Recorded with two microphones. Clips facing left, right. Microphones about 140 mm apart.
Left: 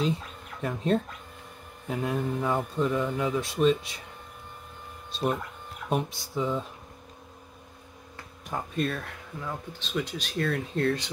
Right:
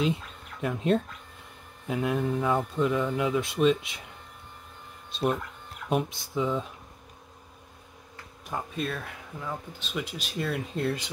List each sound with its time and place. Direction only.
0.6 s speech: centre (ahead or behind)
5.1 s speech: centre (ahead or behind)
8.5 s speech: centre (ahead or behind)